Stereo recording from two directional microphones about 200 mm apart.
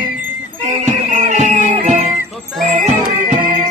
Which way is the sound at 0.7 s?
35° right (ahead or behind).